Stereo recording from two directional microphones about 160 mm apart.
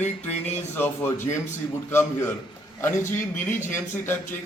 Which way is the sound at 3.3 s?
15° left (ahead or behind).